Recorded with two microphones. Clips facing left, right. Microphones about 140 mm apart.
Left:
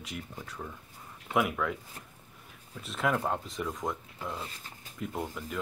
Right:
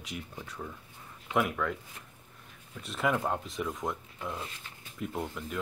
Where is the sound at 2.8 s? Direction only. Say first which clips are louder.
Even; centre (ahead or behind).